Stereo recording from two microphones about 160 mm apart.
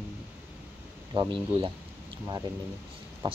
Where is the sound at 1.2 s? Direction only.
30° right (ahead or behind).